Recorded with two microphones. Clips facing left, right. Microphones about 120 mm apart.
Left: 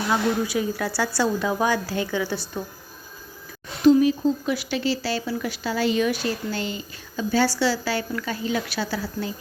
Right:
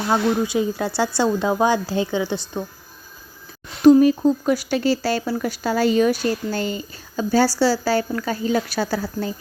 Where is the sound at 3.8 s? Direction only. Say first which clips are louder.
Right 4 dB; 45° right (ahead or behind).